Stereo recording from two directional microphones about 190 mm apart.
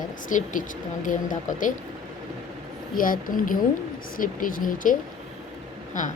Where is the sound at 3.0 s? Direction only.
45° left (ahead or behind).